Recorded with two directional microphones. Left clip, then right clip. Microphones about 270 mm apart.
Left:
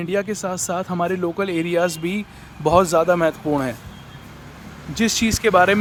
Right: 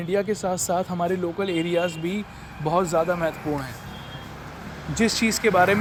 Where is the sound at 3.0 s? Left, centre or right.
Left.